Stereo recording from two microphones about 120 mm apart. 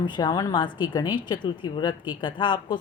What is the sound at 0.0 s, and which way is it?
A woman's voice, 40° left (ahead or behind).